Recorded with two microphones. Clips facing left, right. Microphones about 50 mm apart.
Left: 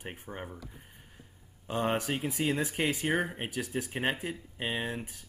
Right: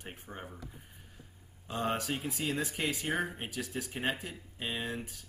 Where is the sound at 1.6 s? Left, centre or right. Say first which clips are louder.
Left 3 dB; left.